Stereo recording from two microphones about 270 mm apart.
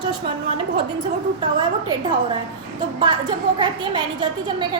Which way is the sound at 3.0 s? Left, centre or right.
Centre.